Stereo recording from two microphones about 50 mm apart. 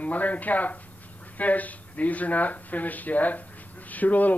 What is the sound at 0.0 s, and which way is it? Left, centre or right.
Speech, left.